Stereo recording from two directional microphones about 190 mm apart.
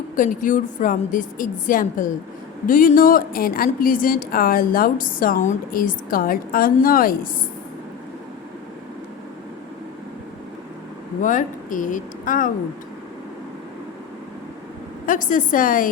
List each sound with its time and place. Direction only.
0.2 s speech: 45° left (ahead or behind)
11.2 s speech: 45° left (ahead or behind)
15.0 s a woman's voice: 45° left (ahead or behind)